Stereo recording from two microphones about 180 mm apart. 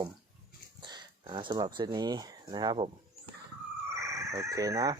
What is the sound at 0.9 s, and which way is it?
Speech, 25° right (ahead or behind).